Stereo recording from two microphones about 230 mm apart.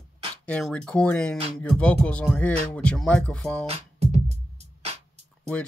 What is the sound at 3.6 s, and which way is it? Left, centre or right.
Music, right.